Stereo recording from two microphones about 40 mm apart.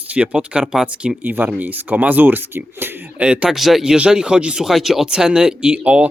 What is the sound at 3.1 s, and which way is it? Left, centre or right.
Speech, right.